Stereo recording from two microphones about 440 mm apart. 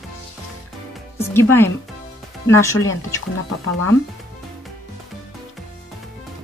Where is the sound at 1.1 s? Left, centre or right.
Centre.